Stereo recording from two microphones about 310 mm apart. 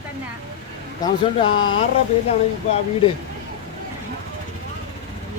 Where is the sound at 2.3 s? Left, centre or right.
Centre.